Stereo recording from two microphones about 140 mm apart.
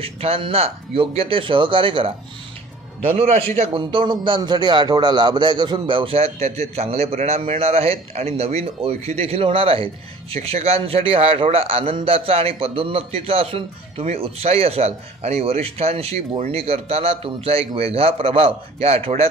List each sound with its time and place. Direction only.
0.0 s a man's voice: 45° right (ahead or behind)